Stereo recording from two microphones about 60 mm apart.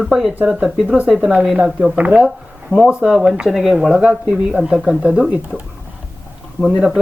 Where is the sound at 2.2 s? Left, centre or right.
Centre.